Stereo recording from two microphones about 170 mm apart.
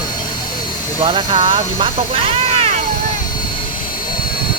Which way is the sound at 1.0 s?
30° right (ahead or behind).